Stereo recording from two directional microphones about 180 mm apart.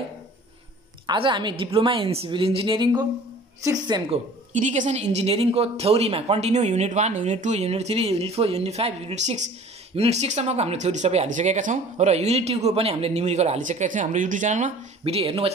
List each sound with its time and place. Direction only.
1.0 s a woman's voice: 25° right (ahead or behind)
4.5 s speech: 45° right (ahead or behind)